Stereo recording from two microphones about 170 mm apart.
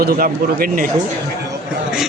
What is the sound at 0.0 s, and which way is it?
Speech, 60° right (ahead or behind).